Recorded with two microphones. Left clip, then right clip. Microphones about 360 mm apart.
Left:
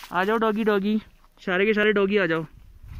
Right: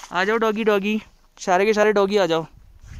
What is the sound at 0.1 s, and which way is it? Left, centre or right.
Speech, centre.